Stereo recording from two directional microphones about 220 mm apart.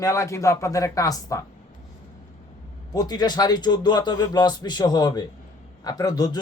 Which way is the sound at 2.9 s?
20° left (ahead or behind).